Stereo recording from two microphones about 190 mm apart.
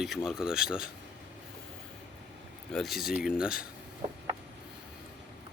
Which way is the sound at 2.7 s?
Centre (ahead or behind).